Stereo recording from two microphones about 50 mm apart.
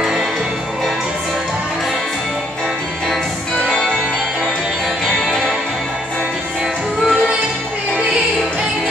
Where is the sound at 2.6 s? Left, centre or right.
Centre.